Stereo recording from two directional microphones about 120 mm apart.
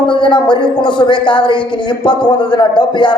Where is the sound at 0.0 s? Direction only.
40° left (ahead or behind).